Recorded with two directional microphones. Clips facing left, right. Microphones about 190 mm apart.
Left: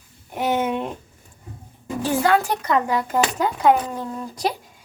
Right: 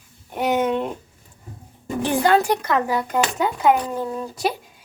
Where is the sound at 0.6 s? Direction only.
5° left (ahead or behind).